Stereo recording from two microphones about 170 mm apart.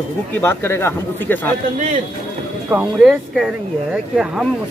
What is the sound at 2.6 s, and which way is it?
Speech, 5° right (ahead or behind).